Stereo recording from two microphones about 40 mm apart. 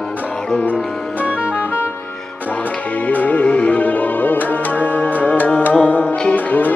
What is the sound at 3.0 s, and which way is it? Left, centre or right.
Music, left.